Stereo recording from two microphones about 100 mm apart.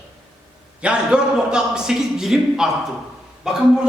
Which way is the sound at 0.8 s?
10° right (ahead or behind).